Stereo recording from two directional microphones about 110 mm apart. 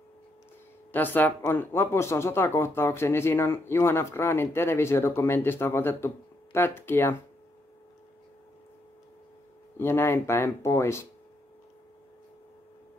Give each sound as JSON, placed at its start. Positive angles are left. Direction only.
{"t": 0.9, "sound": "speech", "side_deg": 15}
{"t": 9.8, "sound": "speech", "side_deg": 20}